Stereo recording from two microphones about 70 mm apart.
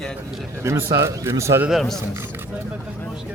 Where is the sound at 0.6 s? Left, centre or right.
Right.